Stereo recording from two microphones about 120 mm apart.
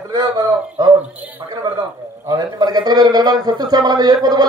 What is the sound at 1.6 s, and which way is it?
Music, 35° right (ahead or behind).